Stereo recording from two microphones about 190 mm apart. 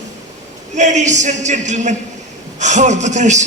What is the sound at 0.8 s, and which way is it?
A man's voice, 40° right (ahead or behind).